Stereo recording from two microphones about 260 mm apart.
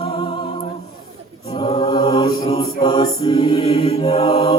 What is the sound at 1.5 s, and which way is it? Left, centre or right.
Mantra, centre.